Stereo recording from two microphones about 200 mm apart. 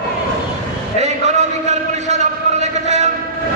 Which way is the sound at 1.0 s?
35° right (ahead or behind).